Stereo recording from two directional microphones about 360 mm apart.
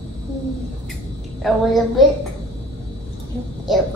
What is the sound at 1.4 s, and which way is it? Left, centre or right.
Speech, centre.